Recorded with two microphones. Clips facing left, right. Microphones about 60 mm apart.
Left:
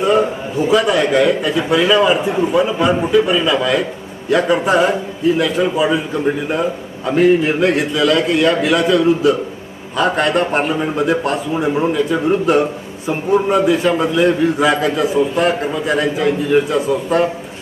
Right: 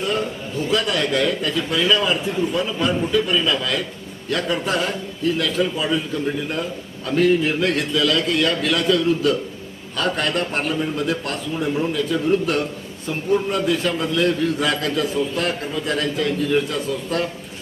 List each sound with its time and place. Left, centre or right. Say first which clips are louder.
0.0 s a man's voice: left 9 dB; centre